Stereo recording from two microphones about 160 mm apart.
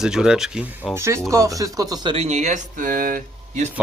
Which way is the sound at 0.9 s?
20° right (ahead or behind).